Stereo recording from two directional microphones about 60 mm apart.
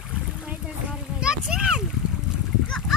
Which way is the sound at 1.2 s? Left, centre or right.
Centre.